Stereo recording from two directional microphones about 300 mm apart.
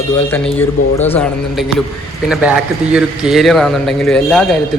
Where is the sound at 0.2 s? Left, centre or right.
Centre.